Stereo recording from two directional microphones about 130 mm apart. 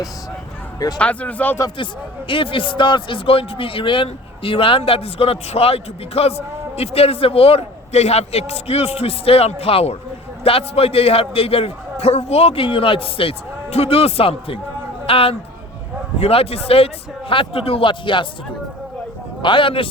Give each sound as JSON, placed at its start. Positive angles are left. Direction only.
{"t": 0.9, "sound": "speech", "side_deg": 10}
{"t": 1.8, "sound": "a man's voice", "side_deg": 40}
{"t": 19.4, "sound": "a man's voice", "side_deg": 40}